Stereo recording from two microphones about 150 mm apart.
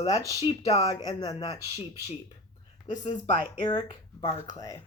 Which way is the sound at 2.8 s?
30° left (ahead or behind).